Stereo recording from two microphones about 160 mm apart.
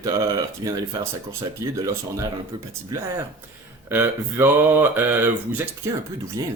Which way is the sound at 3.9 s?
15° right (ahead or behind).